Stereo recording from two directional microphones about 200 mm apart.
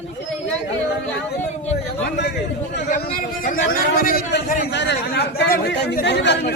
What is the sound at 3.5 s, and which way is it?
A man's voice, 45° left (ahead or behind).